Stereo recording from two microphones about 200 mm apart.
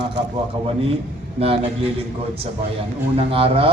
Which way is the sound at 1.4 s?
30° right (ahead or behind).